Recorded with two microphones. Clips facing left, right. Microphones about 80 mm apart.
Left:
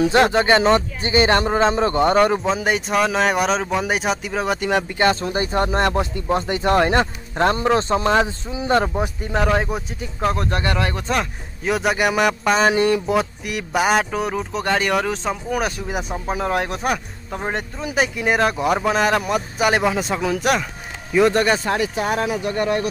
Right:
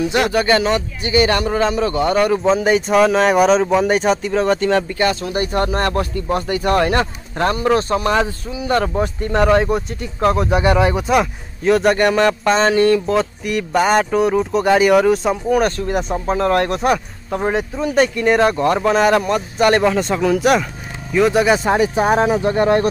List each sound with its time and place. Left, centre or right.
0.1 s speech: left
2.4 s speech: centre
4.9 s speech: left
8.9 s speech: centre
10.6 s speech: centre
11.6 s speech: centre
13.4 s speech: centre
21.7 s speech: right